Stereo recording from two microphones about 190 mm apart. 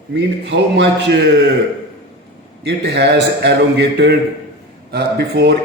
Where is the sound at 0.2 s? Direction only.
65° right (ahead or behind).